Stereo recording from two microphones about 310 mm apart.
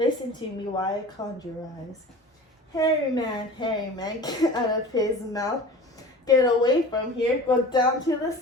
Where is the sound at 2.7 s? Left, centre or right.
Centre.